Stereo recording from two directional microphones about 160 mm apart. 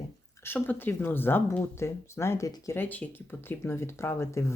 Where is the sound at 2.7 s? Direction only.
10° left (ahead or behind).